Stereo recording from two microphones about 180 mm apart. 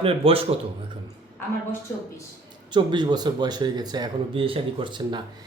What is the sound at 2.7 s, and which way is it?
Speech, 25° right (ahead or behind).